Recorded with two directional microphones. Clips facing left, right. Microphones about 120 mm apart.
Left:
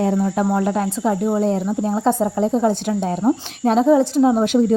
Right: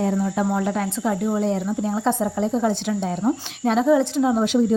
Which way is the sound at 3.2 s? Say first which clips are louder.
Left 4 dB; 35° left (ahead or behind).